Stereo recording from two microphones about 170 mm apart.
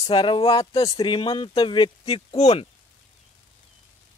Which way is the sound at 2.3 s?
40° left (ahead or behind).